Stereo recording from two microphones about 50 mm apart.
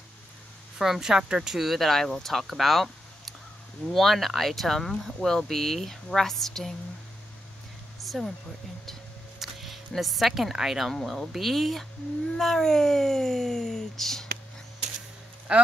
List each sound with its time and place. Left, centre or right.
0.7 s speech: centre
8.0 s a sound: centre
9.4 s speech: centre
10.9 s speech: centre
15.5 s speech: right